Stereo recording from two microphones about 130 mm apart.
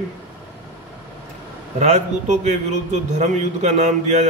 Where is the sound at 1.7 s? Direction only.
60° right (ahead or behind).